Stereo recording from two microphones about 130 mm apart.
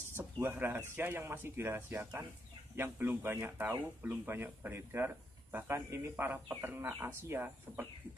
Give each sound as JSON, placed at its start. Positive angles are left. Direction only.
{"t": 0.1, "sound": "speech", "side_deg": -15}